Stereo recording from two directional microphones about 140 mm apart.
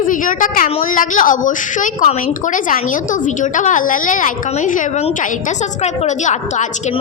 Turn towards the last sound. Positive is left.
turn(degrees=60)  # may be behind; listen again after turning